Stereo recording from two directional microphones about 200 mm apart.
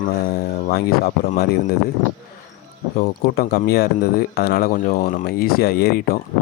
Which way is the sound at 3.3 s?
50° left (ahead or behind).